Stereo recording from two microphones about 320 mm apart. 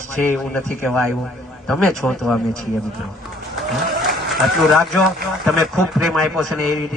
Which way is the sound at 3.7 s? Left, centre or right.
Centre.